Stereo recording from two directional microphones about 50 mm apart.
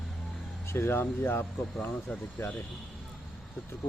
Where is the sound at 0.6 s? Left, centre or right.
Left.